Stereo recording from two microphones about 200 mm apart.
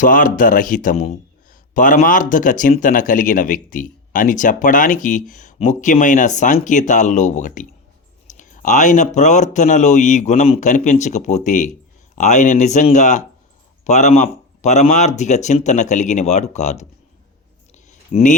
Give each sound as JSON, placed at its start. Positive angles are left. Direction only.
{"t": 0.0, "sound": "speech", "side_deg": 40}
{"t": 18.1, "sound": "speech", "side_deg": 40}